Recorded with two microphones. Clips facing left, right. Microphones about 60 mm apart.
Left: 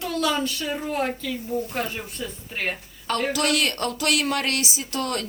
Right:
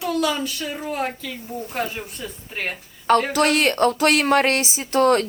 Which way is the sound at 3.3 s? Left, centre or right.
Right.